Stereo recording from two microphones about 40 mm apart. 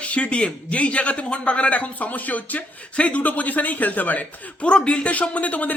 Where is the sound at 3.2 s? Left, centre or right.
Left.